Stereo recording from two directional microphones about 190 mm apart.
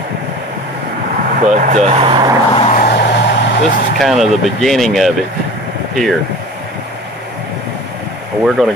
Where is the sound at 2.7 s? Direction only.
55° left (ahead or behind).